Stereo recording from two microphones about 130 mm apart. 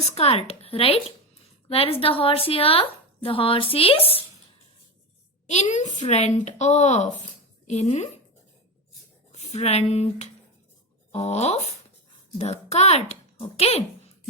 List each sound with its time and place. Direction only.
0.1 s a woman's voice: 50° left (ahead or behind)
5.5 s a woman's voice: 65° left (ahead or behind)
9.3 s a woman's voice: 55° left (ahead or behind)